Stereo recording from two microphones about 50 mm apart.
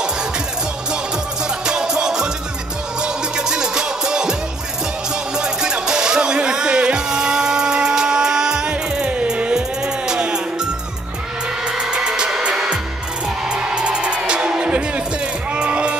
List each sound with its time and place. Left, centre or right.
1.7 s music: centre
13.5 s music: centre